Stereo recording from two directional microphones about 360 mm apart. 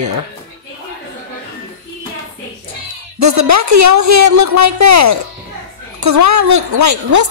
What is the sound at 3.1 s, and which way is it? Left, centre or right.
A woman's voice, right.